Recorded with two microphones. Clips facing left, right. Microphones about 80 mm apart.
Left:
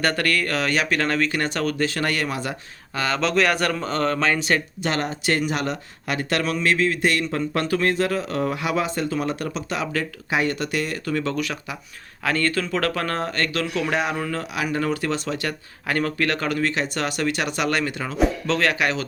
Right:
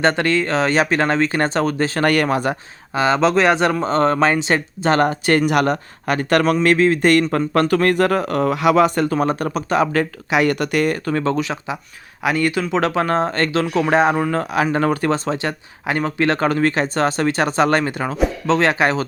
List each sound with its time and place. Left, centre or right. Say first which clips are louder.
0.0 s speech: right 5 dB; right
2.0 s a man's voice: right 8 dB; right
2.9 s speech: right 7 dB; right
4.9 s a man's voice: right 7 dB; right
9.1 s speech: right 6 dB; right
10.3 s a man's voice: right 6 dB; right
11.3 s speech: right 5 dB; right
12.2 s speech: right 4 dB; centre; by 19.0 s right